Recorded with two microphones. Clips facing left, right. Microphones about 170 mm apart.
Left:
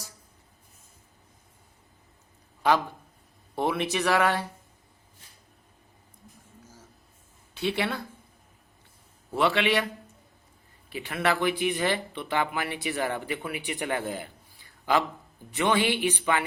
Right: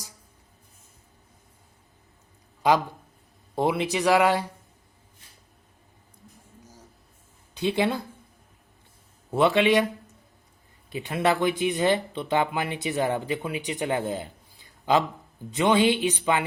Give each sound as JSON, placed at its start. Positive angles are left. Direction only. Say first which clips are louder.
{"t": 3.5, "sound": "speech", "louder": "right 3 dB", "side_deg": -15}
{"t": 7.5, "sound": "speech", "louder": "right 4 dB", "side_deg": -20}
{"t": 9.3, "sound": "speech", "louder": "right 4 dB", "side_deg": -20}
{"t": 10.9, "sound": "speech", "louder": "right 3 dB", "side_deg": -20}